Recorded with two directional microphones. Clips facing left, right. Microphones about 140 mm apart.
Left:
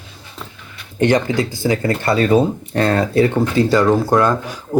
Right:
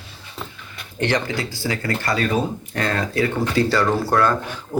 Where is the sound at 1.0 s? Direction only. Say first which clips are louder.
Left 7 dB; 20° left (ahead or behind).